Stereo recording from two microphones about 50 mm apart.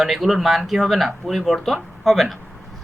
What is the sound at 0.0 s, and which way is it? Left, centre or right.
Speech, centre.